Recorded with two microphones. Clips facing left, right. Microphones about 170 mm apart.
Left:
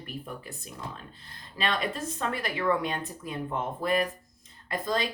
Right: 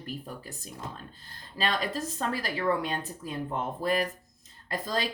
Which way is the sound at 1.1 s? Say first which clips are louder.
Right 3 dB; 40° right (ahead or behind).